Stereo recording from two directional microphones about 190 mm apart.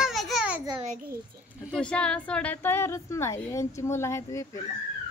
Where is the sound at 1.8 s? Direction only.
5° left (ahead or behind).